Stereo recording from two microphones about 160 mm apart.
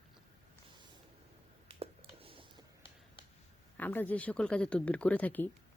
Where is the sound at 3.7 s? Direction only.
10° left (ahead or behind).